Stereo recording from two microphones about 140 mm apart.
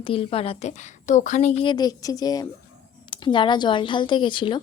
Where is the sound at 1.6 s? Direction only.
30° left (ahead or behind).